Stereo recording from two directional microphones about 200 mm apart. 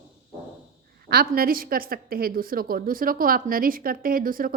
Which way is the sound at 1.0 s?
45° right (ahead or behind).